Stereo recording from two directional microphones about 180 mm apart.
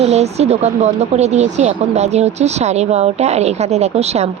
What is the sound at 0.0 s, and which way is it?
Speech, 35° right (ahead or behind).